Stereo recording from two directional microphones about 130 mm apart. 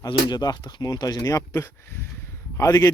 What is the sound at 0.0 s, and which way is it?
A man's voice, 30° left (ahead or behind).